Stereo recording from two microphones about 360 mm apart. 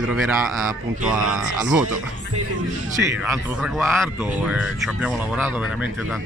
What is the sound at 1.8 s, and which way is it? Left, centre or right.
Speech, right.